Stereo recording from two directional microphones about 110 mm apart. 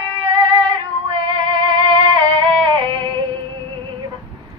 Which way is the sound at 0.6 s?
50° right (ahead or behind).